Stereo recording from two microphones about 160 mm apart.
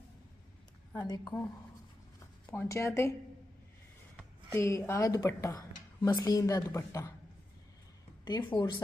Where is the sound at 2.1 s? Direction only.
15° left (ahead or behind).